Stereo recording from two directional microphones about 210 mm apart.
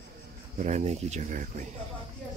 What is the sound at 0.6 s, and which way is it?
Speech, 35° right (ahead or behind).